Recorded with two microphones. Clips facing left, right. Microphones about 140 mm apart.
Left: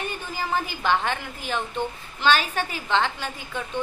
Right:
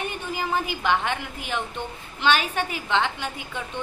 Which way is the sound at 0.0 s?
15° right (ahead or behind).